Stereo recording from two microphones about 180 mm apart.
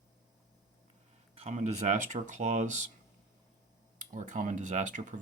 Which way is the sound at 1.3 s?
40° right (ahead or behind).